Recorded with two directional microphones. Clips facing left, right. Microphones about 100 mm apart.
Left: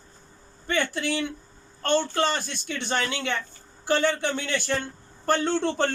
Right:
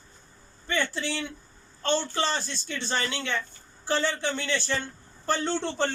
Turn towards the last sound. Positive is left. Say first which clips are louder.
# left 4 dB
turn(degrees=55)  # may be behind; listen again after turning